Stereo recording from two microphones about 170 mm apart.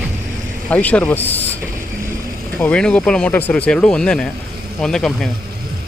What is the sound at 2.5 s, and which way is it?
Speech, 10° left (ahead or behind).